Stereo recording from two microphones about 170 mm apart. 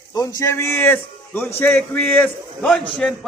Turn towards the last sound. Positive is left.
turn(degrees=5)  # may be behind; listen again after turning